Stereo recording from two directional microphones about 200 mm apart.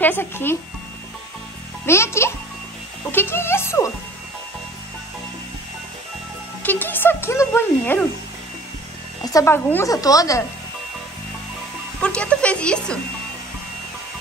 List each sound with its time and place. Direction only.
0.0 s speech: 10° left (ahead or behind)
1.9 s speech: 15° left (ahead or behind)
6.6 s speech: 10° left (ahead or behind)
9.2 s speech: 15° left (ahead or behind)
12.0 s speech: 5° left (ahead or behind)